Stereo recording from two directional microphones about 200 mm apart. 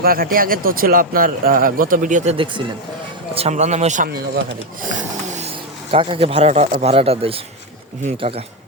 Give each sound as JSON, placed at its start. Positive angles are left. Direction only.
{"t": 0.0, "sound": "speech", "side_deg": -45}
{"t": 2.3, "sound": "speech", "side_deg": -25}
{"t": 4.9, "sound": "snoring", "side_deg": -35}
{"t": 5.9, "sound": "speech", "side_deg": -25}